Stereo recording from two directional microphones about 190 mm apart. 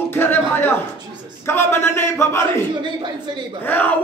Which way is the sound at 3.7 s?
10° left (ahead or behind).